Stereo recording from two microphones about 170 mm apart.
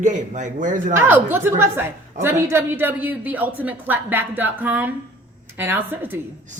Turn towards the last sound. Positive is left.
turn(degrees=-10)  # may be behind; listen again after turning